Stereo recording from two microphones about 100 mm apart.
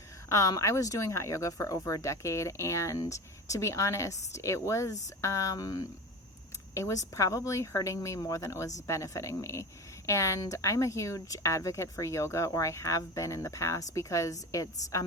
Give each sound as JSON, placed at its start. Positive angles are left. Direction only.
{"t": 0.3, "sound": "speech", "side_deg": 35}